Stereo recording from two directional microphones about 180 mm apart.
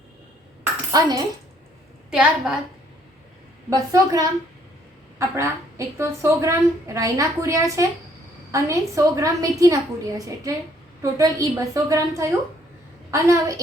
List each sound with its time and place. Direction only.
0.9 s a child's voice: 20° right (ahead or behind)
2.0 s a woman's voice: 5° right (ahead or behind)
3.7 s a woman's voice: 20° right (ahead or behind)